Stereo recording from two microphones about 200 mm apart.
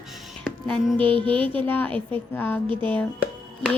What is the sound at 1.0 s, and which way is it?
Music, 25° right (ahead or behind).